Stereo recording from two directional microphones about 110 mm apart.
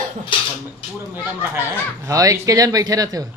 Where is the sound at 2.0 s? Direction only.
30° right (ahead or behind).